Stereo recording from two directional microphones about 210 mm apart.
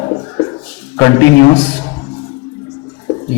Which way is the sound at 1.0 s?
15° left (ahead or behind).